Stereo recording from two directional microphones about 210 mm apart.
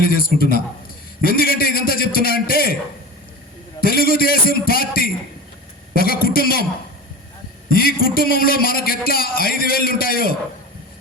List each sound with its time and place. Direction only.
0.0 s a man's voice: 45° left (ahead or behind)
3.8 s a man's voice: 45° left (ahead or behind)
7.7 s a man's voice: 45° left (ahead or behind)